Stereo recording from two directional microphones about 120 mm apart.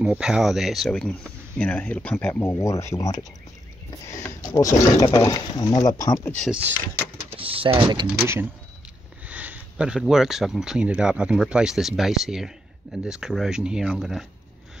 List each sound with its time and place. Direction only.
0.0 s speech: 5° right (ahead or behind); by 2.6 s 15° left (ahead or behind)
2.6 s speech: 25° left (ahead or behind)
7.2 s speech: 50° right (ahead or behind)
9.2 s speech: 15° right (ahead or behind)